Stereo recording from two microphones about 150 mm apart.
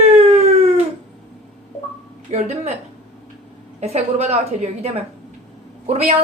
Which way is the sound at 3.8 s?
45° right (ahead or behind).